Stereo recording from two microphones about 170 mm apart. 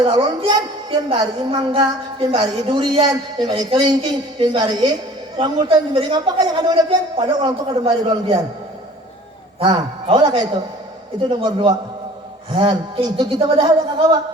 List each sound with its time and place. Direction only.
0.0 s a woman's voice: 25° right (ahead or behind)
9.6 s a woman's voice: 30° right (ahead or behind)